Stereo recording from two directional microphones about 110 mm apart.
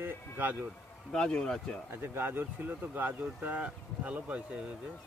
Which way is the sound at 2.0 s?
20° right (ahead or behind).